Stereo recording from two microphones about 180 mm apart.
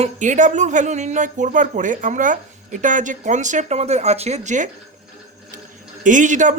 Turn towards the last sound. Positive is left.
turn(degrees=-45)  # may be behind; listen again after turning